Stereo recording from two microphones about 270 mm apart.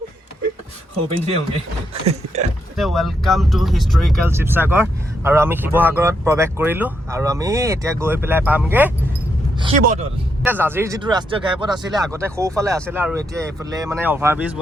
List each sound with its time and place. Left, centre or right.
1.9 s speech: right
2.7 s speech: centre
9.6 s speech: right
10.4 s speech: centre